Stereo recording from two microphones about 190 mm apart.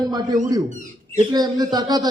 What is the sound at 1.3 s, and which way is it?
Speech, 20° right (ahead or behind).